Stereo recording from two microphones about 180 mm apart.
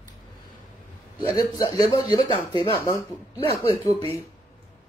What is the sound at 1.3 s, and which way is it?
A man's voice, 20° left (ahead or behind).